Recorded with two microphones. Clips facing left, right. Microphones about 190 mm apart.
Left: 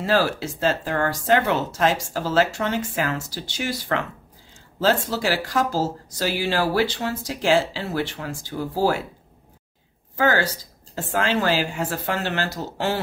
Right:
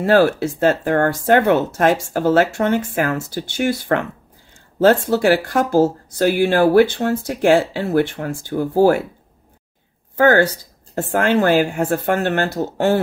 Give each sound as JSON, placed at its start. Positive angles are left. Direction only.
{"t": 0.0, "sound": "speech", "side_deg": -55}
{"t": 10.1, "sound": "speech", "side_deg": -55}